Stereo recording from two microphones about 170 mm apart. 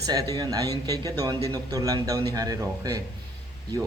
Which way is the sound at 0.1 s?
20° right (ahead or behind).